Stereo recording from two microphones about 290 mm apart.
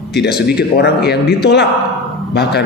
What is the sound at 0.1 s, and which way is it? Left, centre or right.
A man's voice, left.